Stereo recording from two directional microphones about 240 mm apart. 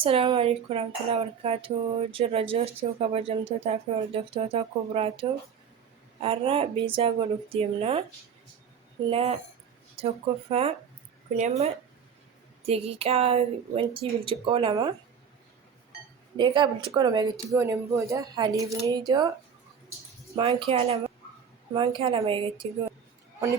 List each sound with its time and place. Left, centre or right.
0.0 s speech: right
6.2 s speech: right
9.0 s speech: right
16.4 s speech: centre
20.3 s speech: right